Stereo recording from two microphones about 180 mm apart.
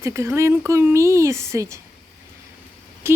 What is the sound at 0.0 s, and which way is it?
Speech, 15° right (ahead or behind).